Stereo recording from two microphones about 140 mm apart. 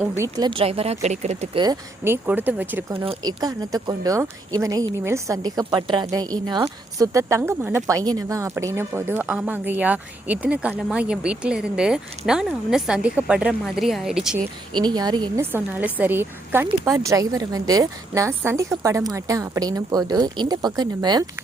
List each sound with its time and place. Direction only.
0.2 s a woman's voice: 30° right (ahead or behind)
0.6 s speech: 45° right (ahead or behind)
1.5 s a woman's voice: 30° right (ahead or behind)
2.0 s speech: 15° right (ahead or behind)
3.2 s a woman's voice: 30° right (ahead or behind); by 14.3 s 5° right (ahead or behind)
14.7 s speech: 30° right (ahead or behind)
15.4 s a woman's voice: 15° right (ahead or behind)